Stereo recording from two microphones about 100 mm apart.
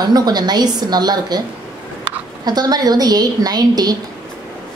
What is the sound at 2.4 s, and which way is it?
A woman's voice, 40° right (ahead or behind).